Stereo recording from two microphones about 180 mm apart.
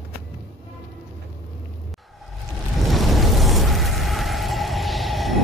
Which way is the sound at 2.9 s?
Centre (ahead or behind).